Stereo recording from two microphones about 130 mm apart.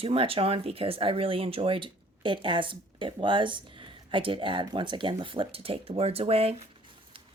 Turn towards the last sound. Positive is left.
turn(degrees=-50)  # may be behind; listen again after turning